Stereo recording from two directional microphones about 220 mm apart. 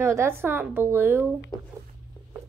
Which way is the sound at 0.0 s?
10° right (ahead or behind).